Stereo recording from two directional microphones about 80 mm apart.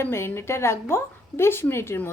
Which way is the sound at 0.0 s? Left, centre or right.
Left.